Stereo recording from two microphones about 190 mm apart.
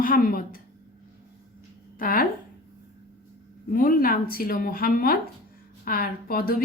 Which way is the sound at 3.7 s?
50° left (ahead or behind).